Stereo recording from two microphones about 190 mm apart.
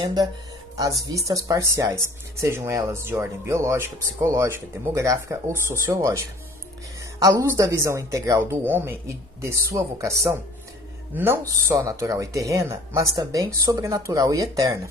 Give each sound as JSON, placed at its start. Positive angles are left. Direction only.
{"t": 0.0, "sound": "speech", "side_deg": -20}
{"t": 7.2, "sound": "speech", "side_deg": -15}